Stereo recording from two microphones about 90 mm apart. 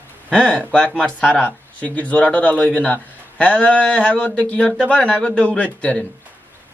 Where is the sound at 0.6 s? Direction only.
10° left (ahead or behind).